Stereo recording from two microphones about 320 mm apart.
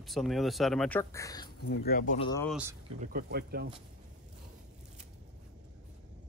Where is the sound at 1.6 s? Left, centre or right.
Left.